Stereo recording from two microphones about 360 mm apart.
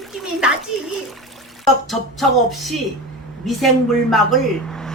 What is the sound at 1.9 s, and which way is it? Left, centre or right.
Speech, centre.